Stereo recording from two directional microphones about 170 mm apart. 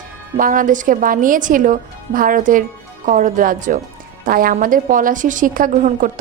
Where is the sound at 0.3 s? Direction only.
50° right (ahead or behind).